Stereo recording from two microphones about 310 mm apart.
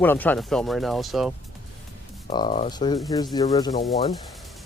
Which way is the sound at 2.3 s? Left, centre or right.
Centre.